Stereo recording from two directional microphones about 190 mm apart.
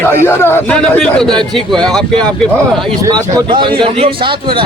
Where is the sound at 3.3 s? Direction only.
25° right (ahead or behind).